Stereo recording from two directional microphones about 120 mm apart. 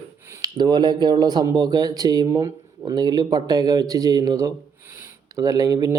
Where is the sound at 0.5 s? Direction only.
35° right (ahead or behind).